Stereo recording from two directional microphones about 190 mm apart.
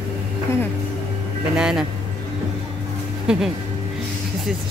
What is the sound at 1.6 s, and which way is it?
Speech, 5° right (ahead or behind).